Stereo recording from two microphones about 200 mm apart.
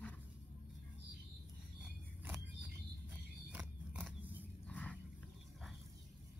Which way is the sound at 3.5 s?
10° right (ahead or behind).